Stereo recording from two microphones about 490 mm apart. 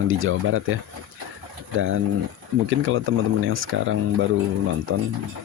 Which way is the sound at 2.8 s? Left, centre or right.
Right.